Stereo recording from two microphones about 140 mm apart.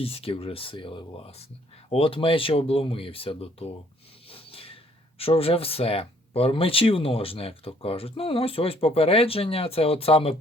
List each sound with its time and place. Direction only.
0.0 s speech: 40° left (ahead or behind)